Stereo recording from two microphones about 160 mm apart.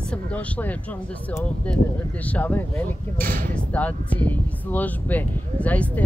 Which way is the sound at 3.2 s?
60° right (ahead or behind).